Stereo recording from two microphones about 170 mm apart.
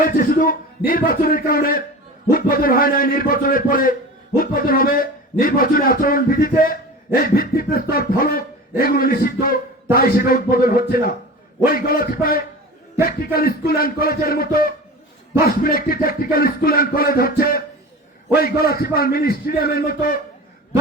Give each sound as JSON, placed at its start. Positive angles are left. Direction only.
{"t": 0.0, "sound": "a man's voice", "side_deg": 55}